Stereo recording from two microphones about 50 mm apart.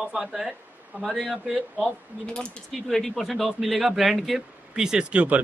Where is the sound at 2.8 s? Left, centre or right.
Centre.